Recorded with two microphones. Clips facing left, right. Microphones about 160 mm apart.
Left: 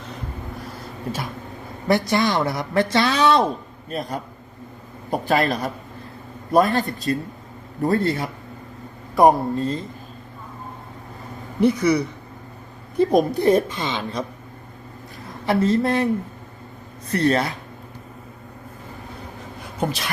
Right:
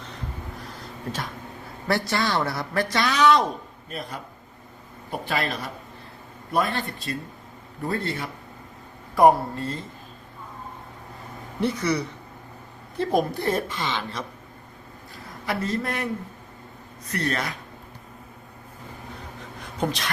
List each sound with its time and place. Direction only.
1.9 s a woman's voice: 20° left (ahead or behind); by 8.3 s 40° left (ahead or behind)
9.1 s a woman's voice: 20° left (ahead or behind)
11.6 s a woman's voice: 10° left (ahead or behind)
15.4 s a woman's voice: 30° left (ahead or behind)
17.1 s a man's voice: 30° left (ahead or behind)
19.8 s speech: 5° left (ahead or behind)